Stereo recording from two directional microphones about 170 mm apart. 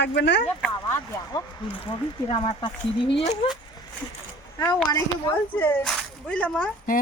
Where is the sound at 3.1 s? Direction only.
30° left (ahead or behind).